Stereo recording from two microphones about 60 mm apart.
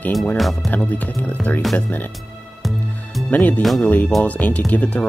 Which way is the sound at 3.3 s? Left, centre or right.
Left.